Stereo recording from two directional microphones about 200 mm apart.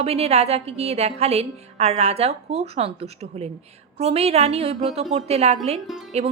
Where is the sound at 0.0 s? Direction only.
30° right (ahead or behind).